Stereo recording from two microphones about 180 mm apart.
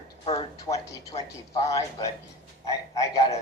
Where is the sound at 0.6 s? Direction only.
20° left (ahead or behind).